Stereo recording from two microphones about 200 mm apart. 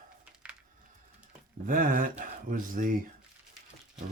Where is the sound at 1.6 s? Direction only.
40° right (ahead or behind).